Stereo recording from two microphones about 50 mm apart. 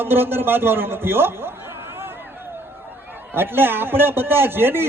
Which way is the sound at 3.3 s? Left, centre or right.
Right.